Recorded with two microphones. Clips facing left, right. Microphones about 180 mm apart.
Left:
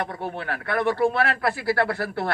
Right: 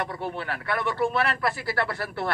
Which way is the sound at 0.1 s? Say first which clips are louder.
Left 1 dB; 55° left (ahead or behind).